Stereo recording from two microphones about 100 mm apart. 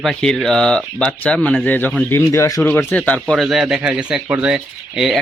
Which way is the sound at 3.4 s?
5° right (ahead or behind).